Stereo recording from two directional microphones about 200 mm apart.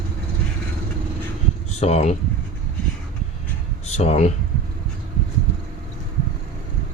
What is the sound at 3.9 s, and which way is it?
Speech, 35° left (ahead or behind).